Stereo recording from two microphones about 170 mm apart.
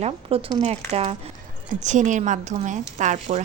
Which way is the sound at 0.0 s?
35° right (ahead or behind).